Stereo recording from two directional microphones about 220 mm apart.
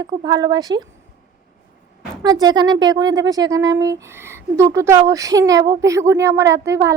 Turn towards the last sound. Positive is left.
turn(degrees=-15)  # may be behind; listen again after turning